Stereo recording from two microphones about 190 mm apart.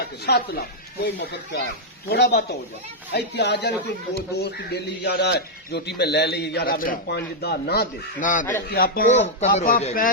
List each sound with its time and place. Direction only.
0.0 s a man's voice: 55° left (ahead or behind)